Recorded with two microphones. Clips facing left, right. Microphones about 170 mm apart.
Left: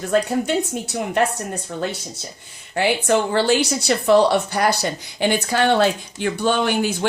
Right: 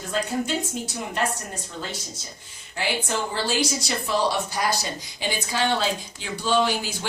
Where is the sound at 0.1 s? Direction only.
60° left (ahead or behind).